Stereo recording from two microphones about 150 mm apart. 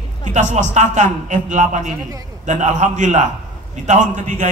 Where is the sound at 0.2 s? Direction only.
55° right (ahead or behind).